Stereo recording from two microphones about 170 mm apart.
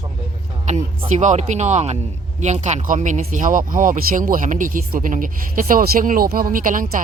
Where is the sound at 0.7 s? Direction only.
45° right (ahead or behind).